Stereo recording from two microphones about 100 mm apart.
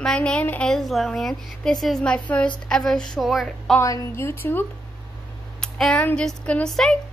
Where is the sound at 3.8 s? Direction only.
25° left (ahead or behind).